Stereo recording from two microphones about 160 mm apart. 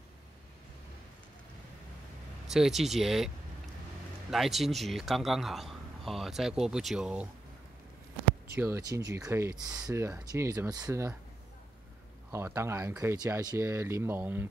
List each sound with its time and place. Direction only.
2.4 s a man's voice: centre (ahead or behind)
4.3 s a man's voice: centre (ahead or behind)
8.5 s speech: 15° right (ahead or behind)
12.3 s speech: 15° right (ahead or behind)